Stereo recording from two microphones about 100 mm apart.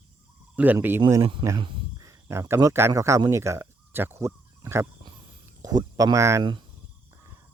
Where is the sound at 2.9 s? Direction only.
30° right (ahead or behind).